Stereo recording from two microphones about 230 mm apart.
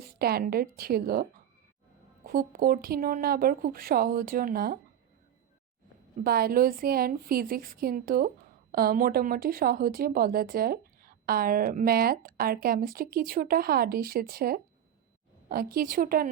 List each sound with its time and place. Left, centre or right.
0.0 s speech: right
6.2 s speech: right